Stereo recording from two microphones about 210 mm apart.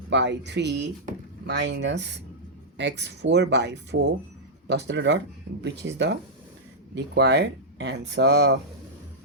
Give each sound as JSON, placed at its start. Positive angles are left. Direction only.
{"t": 0.1, "sound": "speech", "side_deg": -55}